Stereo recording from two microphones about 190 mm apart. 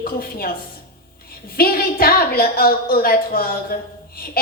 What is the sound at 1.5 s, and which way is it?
A woman's voice, 50° left (ahead or behind).